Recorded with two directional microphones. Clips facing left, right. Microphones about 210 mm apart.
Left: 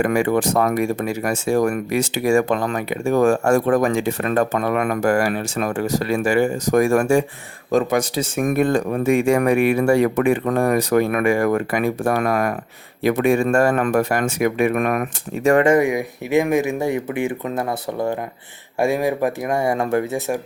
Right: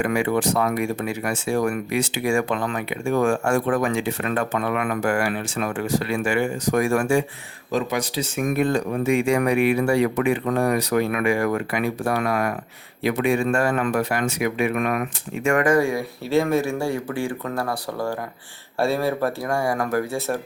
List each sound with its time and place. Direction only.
0.0 s speech: 45° left (ahead or behind)
15.4 s speech: 30° left (ahead or behind)